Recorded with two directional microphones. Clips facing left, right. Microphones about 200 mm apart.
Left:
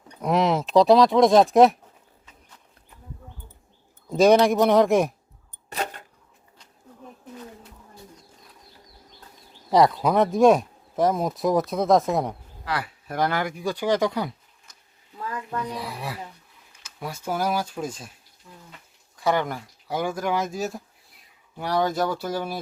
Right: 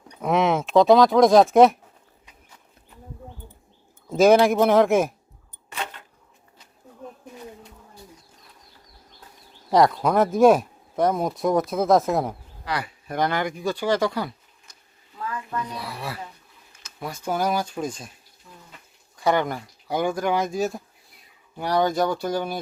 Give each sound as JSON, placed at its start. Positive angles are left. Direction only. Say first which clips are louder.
{"t": 0.2, "sound": "speech", "louder": "right 1 dB", "side_deg": 0}
{"t": 4.1, "sound": "speech", "louder": "right 1 dB", "side_deg": 0}
{"t": 5.7, "sound": "a sound", "louder": "left 3 dB", "side_deg": 40}
{"t": 9.6, "sound": "speech", "louder": "even", "side_deg": 0}
{"t": 15.3, "sound": "speech", "louder": "left 1 dB", "side_deg": 15}
{"t": 19.1, "sound": "speech", "louder": "right 2 dB", "side_deg": 0}